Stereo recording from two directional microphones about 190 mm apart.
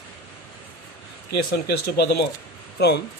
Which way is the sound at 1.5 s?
55° left (ahead or behind).